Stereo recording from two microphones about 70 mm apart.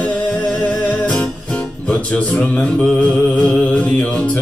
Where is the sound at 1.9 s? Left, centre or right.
Left.